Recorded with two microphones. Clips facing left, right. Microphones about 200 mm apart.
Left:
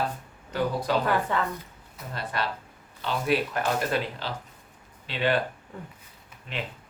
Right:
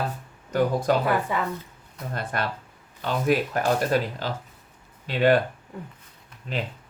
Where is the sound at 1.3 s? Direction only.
10° right (ahead or behind).